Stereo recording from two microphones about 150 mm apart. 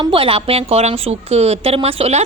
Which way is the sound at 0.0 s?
35° right (ahead or behind).